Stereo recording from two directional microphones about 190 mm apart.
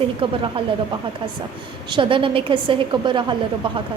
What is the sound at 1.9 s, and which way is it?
A woman's voice, 25° right (ahead or behind).